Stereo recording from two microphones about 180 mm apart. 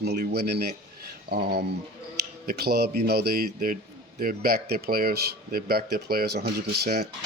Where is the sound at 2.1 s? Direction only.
60° right (ahead or behind).